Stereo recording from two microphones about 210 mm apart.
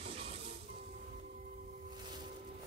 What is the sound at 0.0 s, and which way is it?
Music, 25° right (ahead or behind).